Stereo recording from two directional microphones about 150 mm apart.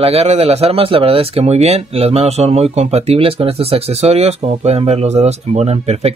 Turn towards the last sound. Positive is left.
turn(degrees=-45)  # may be behind; listen again after turning